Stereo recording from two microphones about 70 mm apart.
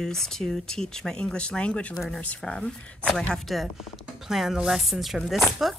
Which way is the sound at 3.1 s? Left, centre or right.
Centre.